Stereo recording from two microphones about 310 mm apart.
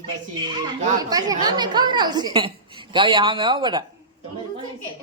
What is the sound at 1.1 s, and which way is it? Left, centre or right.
A woman's voice, centre.